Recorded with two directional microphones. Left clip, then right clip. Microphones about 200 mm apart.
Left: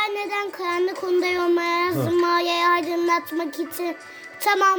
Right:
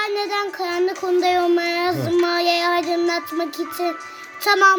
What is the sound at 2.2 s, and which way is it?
Child singing, 55° left (ahead or behind).